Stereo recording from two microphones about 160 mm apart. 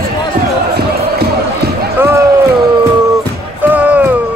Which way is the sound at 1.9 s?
15° right (ahead or behind).